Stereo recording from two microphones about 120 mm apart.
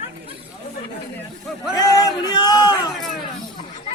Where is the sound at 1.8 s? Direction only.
30° left (ahead or behind).